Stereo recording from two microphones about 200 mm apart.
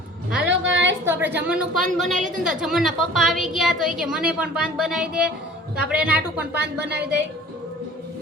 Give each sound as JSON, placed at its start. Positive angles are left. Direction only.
{"t": 0.4, "sound": "a sound", "side_deg": -65}
{"t": 1.0, "sound": "a woman's voice", "side_deg": -10}
{"t": 6.5, "sound": "speech", "side_deg": -55}